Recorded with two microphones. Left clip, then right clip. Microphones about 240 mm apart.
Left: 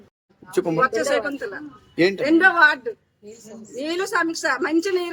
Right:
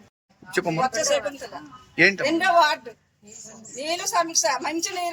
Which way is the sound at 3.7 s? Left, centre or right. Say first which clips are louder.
Left 1 dB; centre.